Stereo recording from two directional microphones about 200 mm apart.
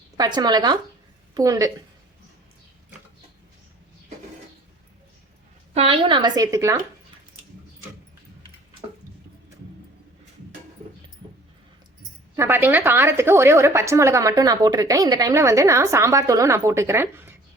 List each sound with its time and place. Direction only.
0.2 s a woman's voice: 20° right (ahead or behind)
5.7 s a woman's voice: 30° right (ahead or behind)
12.4 s a woman's voice: 10° right (ahead or behind)